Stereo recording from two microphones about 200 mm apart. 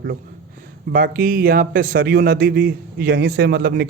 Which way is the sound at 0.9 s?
45° right (ahead or behind).